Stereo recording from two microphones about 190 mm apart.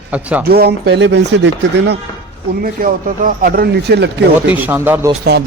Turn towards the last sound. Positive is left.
turn(degrees=-10)  # may be behind; listen again after turning